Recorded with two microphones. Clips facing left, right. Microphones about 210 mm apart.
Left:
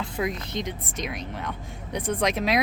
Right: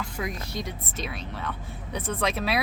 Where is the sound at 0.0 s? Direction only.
20° left (ahead or behind).